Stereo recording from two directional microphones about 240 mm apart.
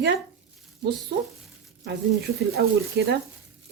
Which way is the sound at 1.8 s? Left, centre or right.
Right.